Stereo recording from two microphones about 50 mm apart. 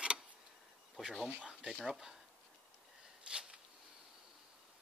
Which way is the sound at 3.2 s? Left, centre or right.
Centre.